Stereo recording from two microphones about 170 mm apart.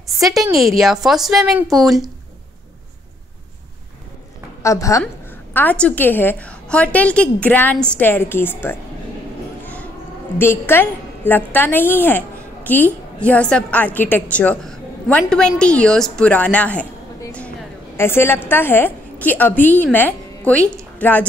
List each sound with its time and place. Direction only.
0.2 s a woman's voice: centre (ahead or behind)
4.6 s a woman's voice: 20° left (ahead or behind)
10.4 s a woman's voice: 15° left (ahead or behind)
17.9 s a woman's voice: 15° left (ahead or behind)